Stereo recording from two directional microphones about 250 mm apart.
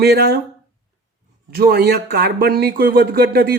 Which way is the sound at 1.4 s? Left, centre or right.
Right.